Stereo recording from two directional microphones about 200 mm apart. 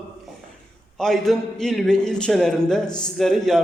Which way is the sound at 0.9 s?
Centre (ahead or behind).